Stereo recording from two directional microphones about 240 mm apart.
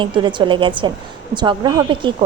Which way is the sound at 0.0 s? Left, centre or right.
Centre.